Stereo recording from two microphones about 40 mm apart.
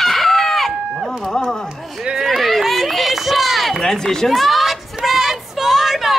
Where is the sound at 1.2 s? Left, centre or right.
Centre.